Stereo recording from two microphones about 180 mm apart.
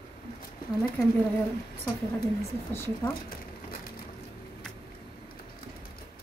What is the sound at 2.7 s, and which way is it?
Speech, 15° left (ahead or behind).